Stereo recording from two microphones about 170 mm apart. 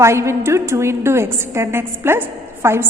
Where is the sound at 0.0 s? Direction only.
15° right (ahead or behind).